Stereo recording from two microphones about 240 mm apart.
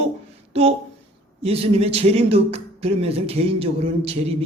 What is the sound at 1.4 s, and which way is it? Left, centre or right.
Speech, right.